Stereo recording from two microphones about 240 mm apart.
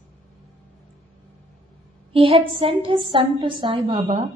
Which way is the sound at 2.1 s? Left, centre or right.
Right.